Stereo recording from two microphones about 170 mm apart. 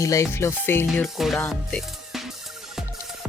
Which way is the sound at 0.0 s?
15° left (ahead or behind).